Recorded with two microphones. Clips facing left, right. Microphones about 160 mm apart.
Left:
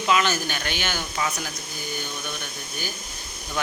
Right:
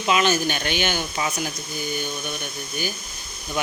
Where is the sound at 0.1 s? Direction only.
20° right (ahead or behind).